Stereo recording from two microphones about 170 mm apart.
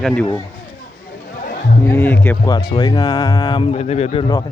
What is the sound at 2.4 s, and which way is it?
Speech, 25° left (ahead or behind).